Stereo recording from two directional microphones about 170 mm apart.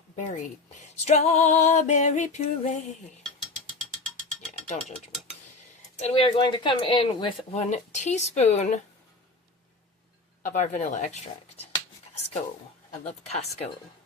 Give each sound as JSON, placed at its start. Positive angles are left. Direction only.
{"t": 1.0, "sound": "music", "side_deg": 40}
{"t": 4.4, "sound": "music", "side_deg": 45}
{"t": 6.0, "sound": "speech", "side_deg": 35}
{"t": 7.5, "sound": "music", "side_deg": 45}
{"t": 10.5, "sound": "music", "side_deg": 45}
{"t": 13.1, "sound": "speech", "side_deg": 40}